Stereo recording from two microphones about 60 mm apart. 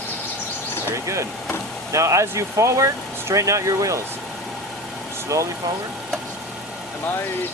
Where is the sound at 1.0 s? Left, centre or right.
Right.